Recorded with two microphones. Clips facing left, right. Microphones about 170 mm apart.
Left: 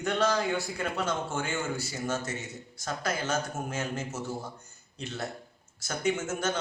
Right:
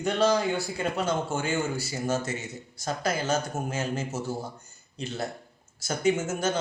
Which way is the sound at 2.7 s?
35° right (ahead or behind).